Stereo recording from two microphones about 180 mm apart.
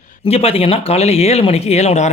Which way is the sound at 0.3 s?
35° left (ahead or behind).